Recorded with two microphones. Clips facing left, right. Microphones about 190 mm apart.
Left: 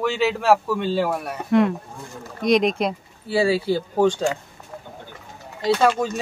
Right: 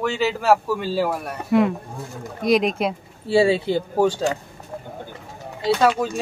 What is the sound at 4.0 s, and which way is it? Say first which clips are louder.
Speech: left 1 dB; 10° right (ahead or behind).